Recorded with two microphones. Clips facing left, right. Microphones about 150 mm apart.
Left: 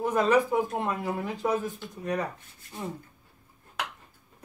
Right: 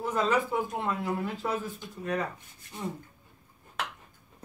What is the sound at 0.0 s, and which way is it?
Speech, 15° left (ahead or behind).